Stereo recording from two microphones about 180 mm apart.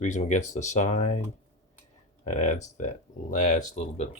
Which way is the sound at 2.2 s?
40° left (ahead or behind).